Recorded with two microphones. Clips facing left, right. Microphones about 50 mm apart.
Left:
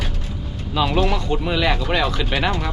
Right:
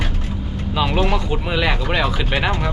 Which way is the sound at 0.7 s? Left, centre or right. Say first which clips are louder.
Even; centre.